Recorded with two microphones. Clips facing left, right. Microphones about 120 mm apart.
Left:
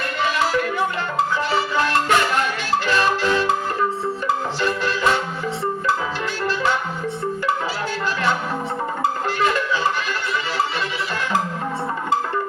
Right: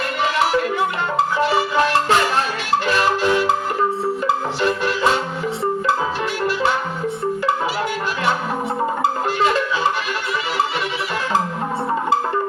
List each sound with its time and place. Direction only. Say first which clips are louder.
0.3 s music: right 3 dB; 20° right (ahead or behind)
4.6 s music: right 2 dB; 20° right (ahead or behind)